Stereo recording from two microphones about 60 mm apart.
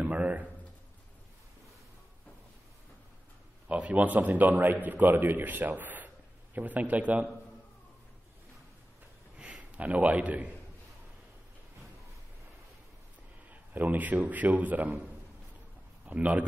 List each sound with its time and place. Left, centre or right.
0.0 s a sound: right
3.6 s a man's voice: right
9.4 s a man's voice: centre
13.5 s a man's voice: right
16.1 s a man's voice: right